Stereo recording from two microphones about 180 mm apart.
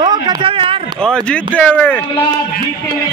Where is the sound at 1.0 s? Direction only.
5° left (ahead or behind).